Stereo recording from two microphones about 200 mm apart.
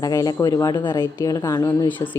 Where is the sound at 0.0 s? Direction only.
15° left (ahead or behind).